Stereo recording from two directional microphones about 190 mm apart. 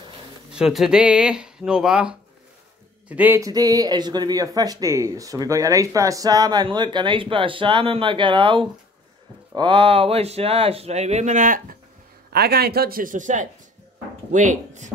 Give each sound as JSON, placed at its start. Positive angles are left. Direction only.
{"t": 0.5, "sound": "speech", "side_deg": -5}
{"t": 12.3, "sound": "speech", "side_deg": -55}